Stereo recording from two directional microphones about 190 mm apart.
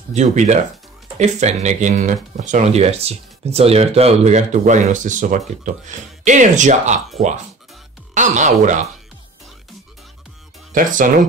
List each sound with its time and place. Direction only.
0.1 s speech: 35° right (ahead or behind)
8.1 s speech: 40° right (ahead or behind)
10.7 s speech: 45° right (ahead or behind)